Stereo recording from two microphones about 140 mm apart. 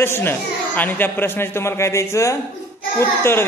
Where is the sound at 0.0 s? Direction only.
15° left (ahead or behind).